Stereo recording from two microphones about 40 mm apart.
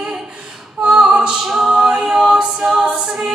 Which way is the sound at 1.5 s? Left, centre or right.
Centre.